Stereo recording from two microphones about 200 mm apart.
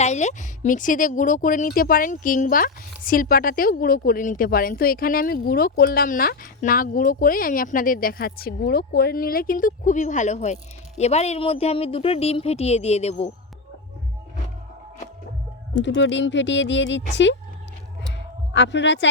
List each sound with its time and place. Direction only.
0.0 s speech: 35° left (ahead or behind)
15.7 s speech: 65° left (ahead or behind)
18.5 s speech: 60° left (ahead or behind)